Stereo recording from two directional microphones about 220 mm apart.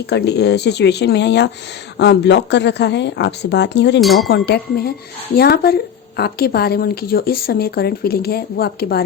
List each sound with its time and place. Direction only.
0.1 s speech: 50° left (ahead or behind)
4.0 s a sound: centre (ahead or behind)
4.3 s speech: 45° left (ahead or behind)